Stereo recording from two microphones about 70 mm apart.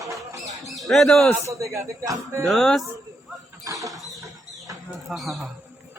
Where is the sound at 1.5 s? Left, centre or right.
Right.